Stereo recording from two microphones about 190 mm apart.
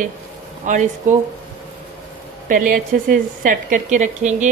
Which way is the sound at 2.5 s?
45° right (ahead or behind).